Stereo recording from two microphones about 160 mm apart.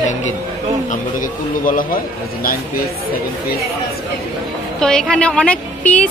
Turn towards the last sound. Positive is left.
turn(degrees=10)  # may be behind; listen again after turning